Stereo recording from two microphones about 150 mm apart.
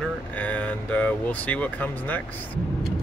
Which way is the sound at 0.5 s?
10° left (ahead or behind).